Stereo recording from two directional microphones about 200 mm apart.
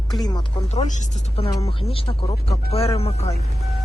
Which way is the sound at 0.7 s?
35° left (ahead or behind).